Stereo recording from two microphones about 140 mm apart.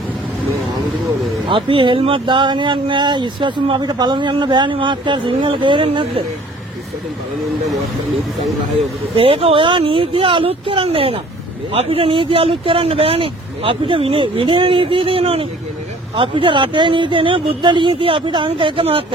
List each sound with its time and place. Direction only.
1.5 s speech: 35° right (ahead or behind)
9.1 s speech: 40° right (ahead or behind)